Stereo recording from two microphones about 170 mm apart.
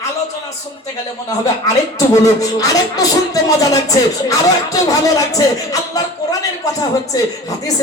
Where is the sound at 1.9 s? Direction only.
20° left (ahead or behind).